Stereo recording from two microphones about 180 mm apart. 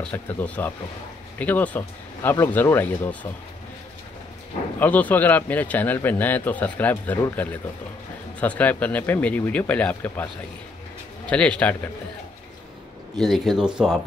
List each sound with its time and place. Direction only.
0.0 s a man's voice: 10° left (ahead or behind)
4.7 s a man's voice: 10° left (ahead or behind)
13.2 s speech: centre (ahead or behind)